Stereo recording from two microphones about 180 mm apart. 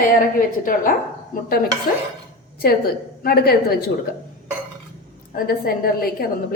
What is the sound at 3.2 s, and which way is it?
Speech, 60° left (ahead or behind).